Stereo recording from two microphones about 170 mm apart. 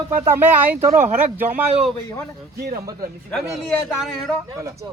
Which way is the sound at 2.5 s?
55° right (ahead or behind).